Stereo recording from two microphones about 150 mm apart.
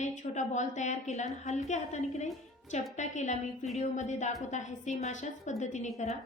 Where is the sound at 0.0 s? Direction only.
55° left (ahead or behind).